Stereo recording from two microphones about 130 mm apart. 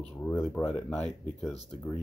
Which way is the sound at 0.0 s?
10° left (ahead or behind).